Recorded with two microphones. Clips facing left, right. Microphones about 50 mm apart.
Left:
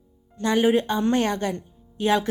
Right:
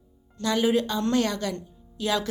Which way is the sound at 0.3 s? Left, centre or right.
Left.